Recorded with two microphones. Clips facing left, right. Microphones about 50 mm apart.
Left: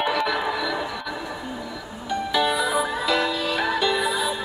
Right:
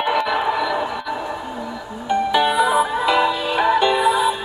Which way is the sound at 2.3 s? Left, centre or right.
Centre.